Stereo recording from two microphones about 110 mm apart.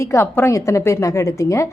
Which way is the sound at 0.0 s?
25° left (ahead or behind).